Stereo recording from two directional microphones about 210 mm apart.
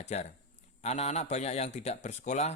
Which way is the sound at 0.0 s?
30° left (ahead or behind).